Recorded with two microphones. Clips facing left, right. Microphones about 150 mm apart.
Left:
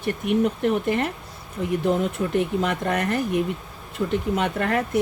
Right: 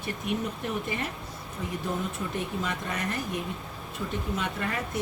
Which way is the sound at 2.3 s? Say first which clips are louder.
Left 9 dB; 60° left (ahead or behind).